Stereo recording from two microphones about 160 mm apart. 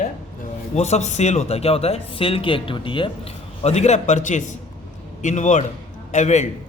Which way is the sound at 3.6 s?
45° left (ahead or behind).